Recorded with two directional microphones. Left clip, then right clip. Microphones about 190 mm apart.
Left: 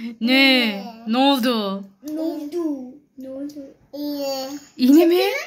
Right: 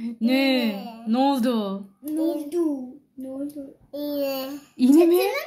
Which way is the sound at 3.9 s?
20° right (ahead or behind).